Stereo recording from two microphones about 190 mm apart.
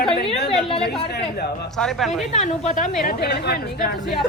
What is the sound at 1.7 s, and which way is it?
Speech, centre (ahead or behind).